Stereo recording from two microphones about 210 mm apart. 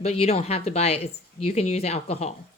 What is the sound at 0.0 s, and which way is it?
Speech, 30° left (ahead or behind).